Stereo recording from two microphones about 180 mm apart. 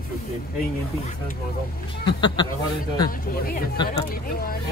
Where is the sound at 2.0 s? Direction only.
25° left (ahead or behind).